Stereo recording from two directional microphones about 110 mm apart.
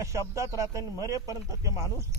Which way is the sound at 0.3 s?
30° right (ahead or behind).